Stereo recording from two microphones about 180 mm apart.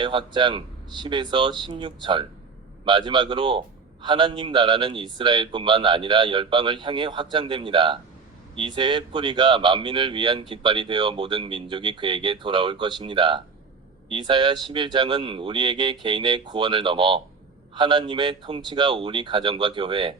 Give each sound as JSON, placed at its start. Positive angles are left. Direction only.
{"t": 0.0, "sound": "speech", "side_deg": -25}